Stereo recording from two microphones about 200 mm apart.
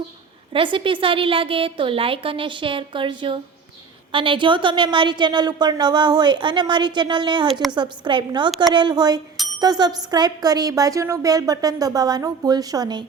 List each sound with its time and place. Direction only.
0.5 s speech: 25° right (ahead or behind)
8.4 s a woman's voice: centre (ahead or behind)
8.7 s speech: 20° right (ahead or behind)